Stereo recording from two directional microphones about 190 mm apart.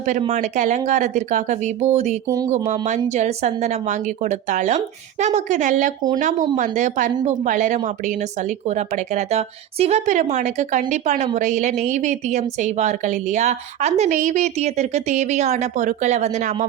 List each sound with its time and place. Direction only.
0.0 s a woman's voice: 40° right (ahead or behind)
2.2 s speech: 20° right (ahead or behind)
3.1 s a woman's voice: 35° right (ahead or behind)